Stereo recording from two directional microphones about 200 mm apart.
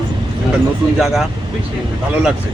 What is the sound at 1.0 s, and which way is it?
Speech, centre (ahead or behind).